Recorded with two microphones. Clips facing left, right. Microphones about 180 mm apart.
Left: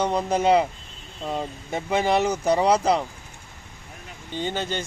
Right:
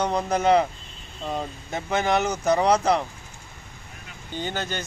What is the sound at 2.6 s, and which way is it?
Speech, 10° left (ahead or behind).